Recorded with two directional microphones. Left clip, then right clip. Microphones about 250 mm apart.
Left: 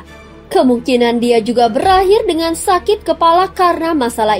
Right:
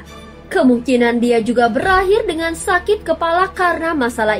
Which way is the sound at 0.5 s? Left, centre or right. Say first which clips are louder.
Left 2 dB; left.